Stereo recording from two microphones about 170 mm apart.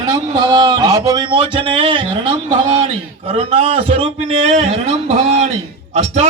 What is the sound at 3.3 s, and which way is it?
A man's voice, 35° right (ahead or behind).